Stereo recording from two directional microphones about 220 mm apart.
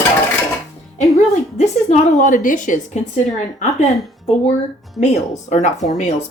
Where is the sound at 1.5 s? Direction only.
30° left (ahead or behind).